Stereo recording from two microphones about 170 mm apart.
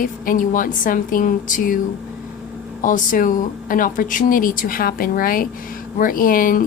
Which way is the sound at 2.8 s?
50° left (ahead or behind).